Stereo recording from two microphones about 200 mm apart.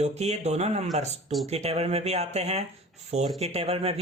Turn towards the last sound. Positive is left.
turn(degrees=-30)  # may be behind; listen again after turning